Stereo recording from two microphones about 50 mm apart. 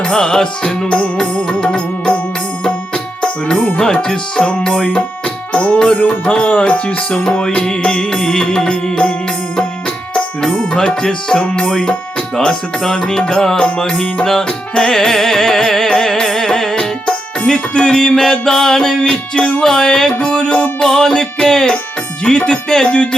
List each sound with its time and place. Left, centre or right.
0.0 s music: centre
10.4 s speech: centre
12.5 s music: centre
14.3 s music: centre
19.1 s music: left